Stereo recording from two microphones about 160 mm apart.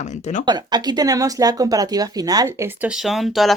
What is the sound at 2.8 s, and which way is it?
Speech, centre (ahead or behind).